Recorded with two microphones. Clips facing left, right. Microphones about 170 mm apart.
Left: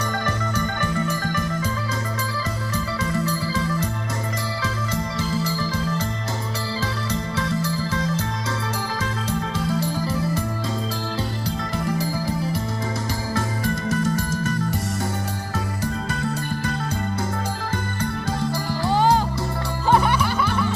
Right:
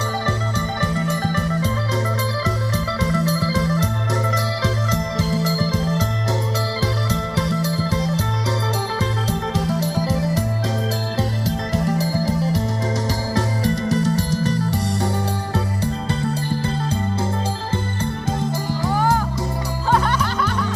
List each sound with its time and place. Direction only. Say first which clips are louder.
0.8 s music: right 2 dB; 35° right (ahead or behind)
2.7 s music: right 1 dB; 40° right (ahead or behind)
7.1 s music: right 2 dB; 35° right (ahead or behind)
9.6 s music: right 3 dB; 40° right (ahead or behind)
11.4 s music: right 3 dB; 40° right (ahead or behind)
18.0 s music: even; 20° right (ahead or behind)
18.9 s music: left 2 dB; 25° left (ahead or behind)
19.9 s music: left 1 dB; 10° left (ahead or behind)